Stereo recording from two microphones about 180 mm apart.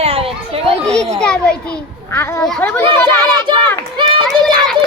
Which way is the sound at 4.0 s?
25° right (ahead or behind).